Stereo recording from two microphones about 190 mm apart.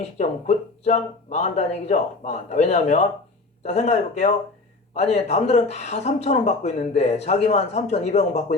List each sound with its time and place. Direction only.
0.0 s speech: 35° left (ahead or behind)